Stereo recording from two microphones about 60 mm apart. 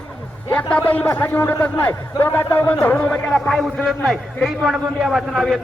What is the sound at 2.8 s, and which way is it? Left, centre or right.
Speech, centre.